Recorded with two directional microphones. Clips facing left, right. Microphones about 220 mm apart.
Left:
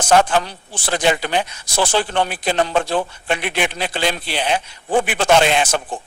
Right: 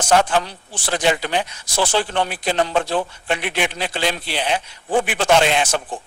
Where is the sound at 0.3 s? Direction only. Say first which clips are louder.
Left 1 dB; 50° left (ahead or behind).